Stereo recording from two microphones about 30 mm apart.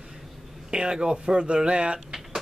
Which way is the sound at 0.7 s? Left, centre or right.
Right.